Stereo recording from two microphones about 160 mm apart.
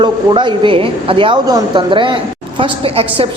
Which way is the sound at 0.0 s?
30° right (ahead or behind).